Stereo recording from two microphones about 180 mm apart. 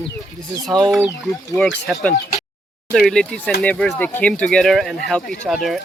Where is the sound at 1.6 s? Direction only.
5° left (ahead or behind).